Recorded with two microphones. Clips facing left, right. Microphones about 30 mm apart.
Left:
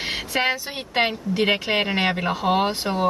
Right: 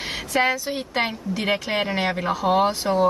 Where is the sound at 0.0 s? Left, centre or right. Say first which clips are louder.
Right 1 dB; left.